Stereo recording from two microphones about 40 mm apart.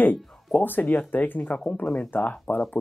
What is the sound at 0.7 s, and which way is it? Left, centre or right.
Speech, left.